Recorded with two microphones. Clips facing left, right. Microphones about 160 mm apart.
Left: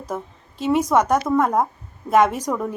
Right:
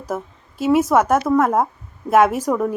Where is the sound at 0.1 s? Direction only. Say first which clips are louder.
Right 3 dB; 5° right (ahead or behind).